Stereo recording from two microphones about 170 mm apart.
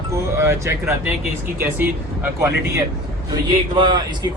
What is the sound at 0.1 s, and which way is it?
Speech, 15° right (ahead or behind).